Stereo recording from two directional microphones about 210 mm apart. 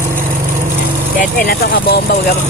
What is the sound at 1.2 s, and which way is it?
Speech, 45° left (ahead or behind).